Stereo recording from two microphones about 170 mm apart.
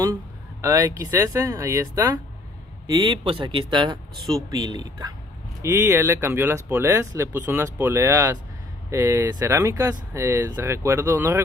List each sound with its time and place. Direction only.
0.1 s speech: 20° right (ahead or behind)